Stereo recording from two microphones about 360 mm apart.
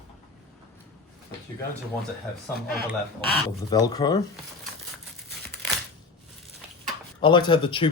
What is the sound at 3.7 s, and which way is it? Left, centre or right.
Speech, centre.